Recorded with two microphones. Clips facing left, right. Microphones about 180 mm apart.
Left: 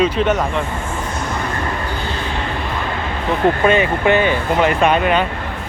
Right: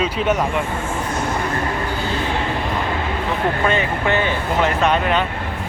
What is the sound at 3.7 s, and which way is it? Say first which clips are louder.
Speech: left 5 dB; 15° left (ahead or behind).